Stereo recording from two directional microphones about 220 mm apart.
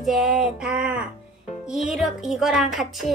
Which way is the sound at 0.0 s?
Centre (ahead or behind).